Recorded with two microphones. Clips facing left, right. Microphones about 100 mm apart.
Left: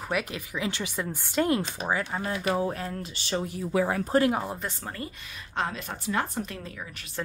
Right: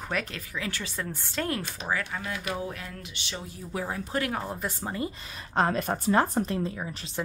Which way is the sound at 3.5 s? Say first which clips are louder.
Left 7 dB; 70° left (ahead or behind).